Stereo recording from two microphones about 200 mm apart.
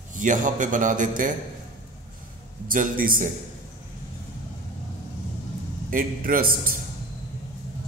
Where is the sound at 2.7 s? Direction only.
45° right (ahead or behind).